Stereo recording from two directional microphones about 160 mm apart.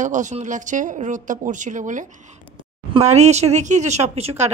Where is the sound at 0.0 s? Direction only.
50° right (ahead or behind).